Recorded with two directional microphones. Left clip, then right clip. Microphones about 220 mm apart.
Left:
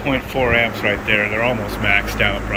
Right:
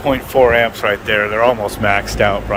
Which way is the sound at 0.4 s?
25° right (ahead or behind).